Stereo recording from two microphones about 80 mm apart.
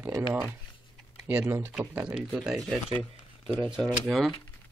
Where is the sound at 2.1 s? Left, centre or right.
Centre.